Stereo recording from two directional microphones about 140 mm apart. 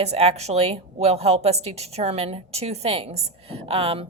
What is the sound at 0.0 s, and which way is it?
A woman's voice, 45° right (ahead or behind).